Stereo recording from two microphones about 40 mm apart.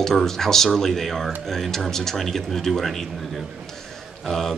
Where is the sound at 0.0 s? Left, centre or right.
Centre.